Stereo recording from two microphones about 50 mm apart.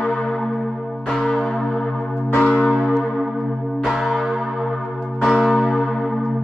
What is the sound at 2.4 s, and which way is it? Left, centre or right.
Church bell, left.